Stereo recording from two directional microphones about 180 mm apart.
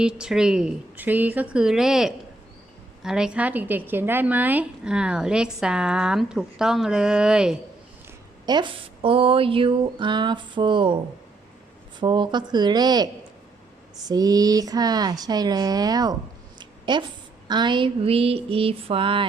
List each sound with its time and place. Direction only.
0.0 s a woman's voice: 5° right (ahead or behind)
8.4 s speech: 25° right (ahead or behind)
11.9 s speech: 25° right (ahead or behind)
14.1 s speech: 20° right (ahead or behind)
16.6 s a sound: 25° right (ahead or behind)